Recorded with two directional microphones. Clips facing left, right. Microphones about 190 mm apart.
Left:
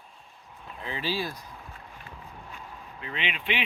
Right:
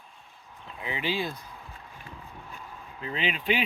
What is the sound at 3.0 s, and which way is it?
Speech, 35° right (ahead or behind).